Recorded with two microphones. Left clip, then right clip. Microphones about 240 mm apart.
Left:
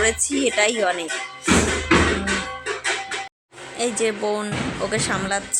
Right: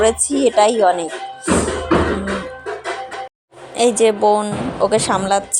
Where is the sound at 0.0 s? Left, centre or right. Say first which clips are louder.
Right 6 dB; centre.